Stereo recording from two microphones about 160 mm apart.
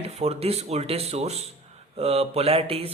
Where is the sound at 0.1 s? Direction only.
40° right (ahead or behind).